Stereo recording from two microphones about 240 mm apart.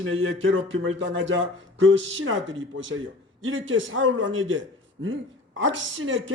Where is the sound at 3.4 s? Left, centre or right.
Right.